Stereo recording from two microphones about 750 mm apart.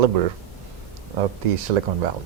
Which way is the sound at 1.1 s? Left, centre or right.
Right.